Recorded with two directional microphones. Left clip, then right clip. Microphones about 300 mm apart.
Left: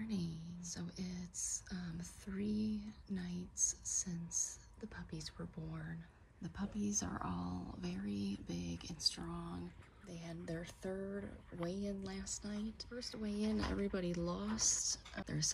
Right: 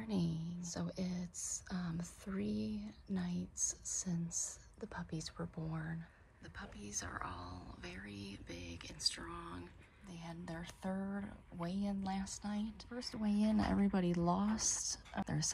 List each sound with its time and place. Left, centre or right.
0.1 s a sound: centre
6.4 s speech: left
10.0 s speech: centre